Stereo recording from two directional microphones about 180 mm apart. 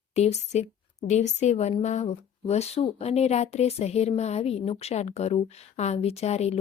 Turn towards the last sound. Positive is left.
turn(degrees=35)  # may be behind; listen again after turning